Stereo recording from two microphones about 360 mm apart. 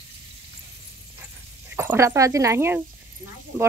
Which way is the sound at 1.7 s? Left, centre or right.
Centre.